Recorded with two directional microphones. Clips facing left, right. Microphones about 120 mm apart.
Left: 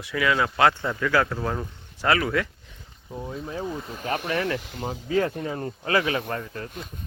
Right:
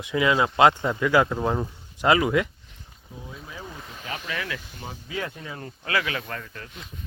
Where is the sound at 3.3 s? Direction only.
40° left (ahead or behind).